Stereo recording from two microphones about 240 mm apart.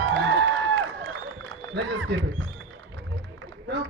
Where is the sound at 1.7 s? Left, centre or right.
Right.